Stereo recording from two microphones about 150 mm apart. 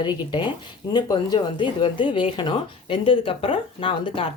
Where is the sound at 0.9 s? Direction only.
30° left (ahead or behind).